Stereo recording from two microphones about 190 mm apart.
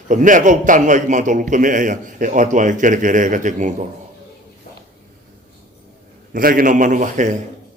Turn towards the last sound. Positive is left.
turn(degrees=-40)  # may be behind; listen again after turning